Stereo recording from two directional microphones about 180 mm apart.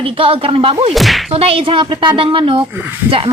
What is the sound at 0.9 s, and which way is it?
Whip, centre (ahead or behind).